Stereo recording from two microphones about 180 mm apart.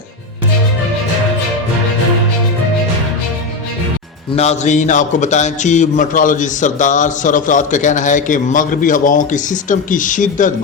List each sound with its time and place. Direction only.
4.4 s a man's voice: 40° left (ahead or behind)